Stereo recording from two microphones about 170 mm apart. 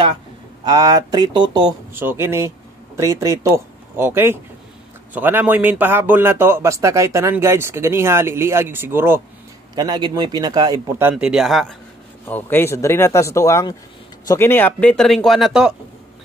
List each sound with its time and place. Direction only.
0.7 s speech: 20° right (ahead or behind)
2.0 s a man's voice: 15° right (ahead or behind)
9.8 s speech: 25° right (ahead or behind); by 11.7 s centre (ahead or behind)
12.3 s speech: 10° left (ahead or behind)